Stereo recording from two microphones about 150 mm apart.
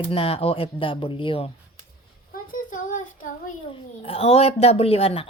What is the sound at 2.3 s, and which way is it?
Child singing, 65° left (ahead or behind).